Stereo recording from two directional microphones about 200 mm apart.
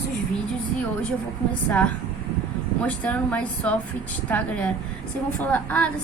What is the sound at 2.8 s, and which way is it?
A woman's voice, 5° left (ahead or behind).